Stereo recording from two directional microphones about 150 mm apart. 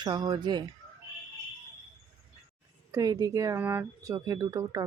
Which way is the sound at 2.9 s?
25° right (ahead or behind).